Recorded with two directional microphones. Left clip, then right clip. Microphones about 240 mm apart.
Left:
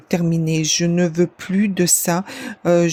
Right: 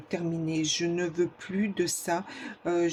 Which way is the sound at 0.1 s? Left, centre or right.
Left.